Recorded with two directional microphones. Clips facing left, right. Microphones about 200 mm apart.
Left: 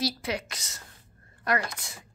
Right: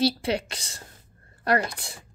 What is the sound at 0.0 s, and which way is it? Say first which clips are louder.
A woman's voice: right 6 dB; 30° right (ahead or behind).